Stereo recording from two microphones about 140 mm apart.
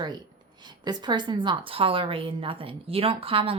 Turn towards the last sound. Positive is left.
turn(degrees=-40)  # may be behind; listen again after turning